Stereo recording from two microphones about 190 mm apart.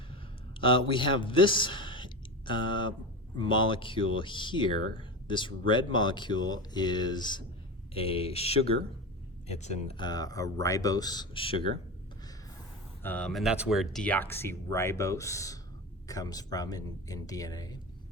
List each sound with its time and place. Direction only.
0.1 s a sound: 25° left (ahead or behind)
3.3 s speech: 25° left (ahead or behind)
10.0 s speech: 20° left (ahead or behind)
13.0 s speech: 10° left (ahead or behind)